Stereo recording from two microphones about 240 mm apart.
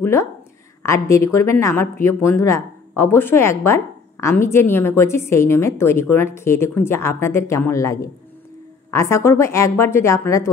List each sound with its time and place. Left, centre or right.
0.0 s a woman's voice: centre